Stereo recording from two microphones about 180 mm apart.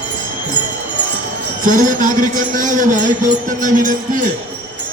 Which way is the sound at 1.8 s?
45° right (ahead or behind).